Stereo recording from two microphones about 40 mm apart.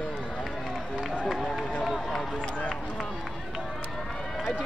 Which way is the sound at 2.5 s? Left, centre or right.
Left.